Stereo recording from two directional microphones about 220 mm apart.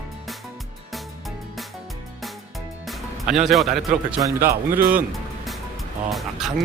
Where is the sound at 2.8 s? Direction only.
Centre (ahead or behind).